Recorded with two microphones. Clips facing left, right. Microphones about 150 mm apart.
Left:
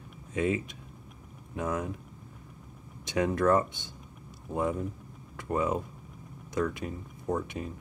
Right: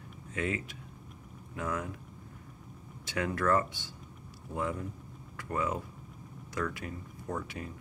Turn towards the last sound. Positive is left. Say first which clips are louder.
# left 6 dB
turn(degrees=20)  # may be behind; listen again after turning